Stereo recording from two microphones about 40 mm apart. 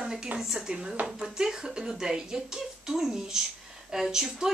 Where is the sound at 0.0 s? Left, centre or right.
Centre.